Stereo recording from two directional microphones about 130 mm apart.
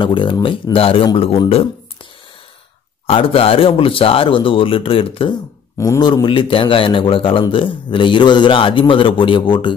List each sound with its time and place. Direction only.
0.0 s a man's voice: 40° left (ahead or behind)
3.1 s speech: 45° left (ahead or behind)
5.8 s a man's voice: 30° left (ahead or behind)